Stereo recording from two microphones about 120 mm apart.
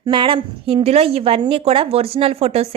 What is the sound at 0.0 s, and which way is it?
Speech, 45° right (ahead or behind).